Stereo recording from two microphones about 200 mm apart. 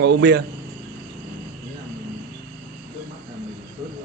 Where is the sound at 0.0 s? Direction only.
55° right (ahead or behind).